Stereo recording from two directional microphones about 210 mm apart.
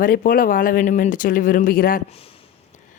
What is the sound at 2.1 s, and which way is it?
Speech, 25° left (ahead or behind).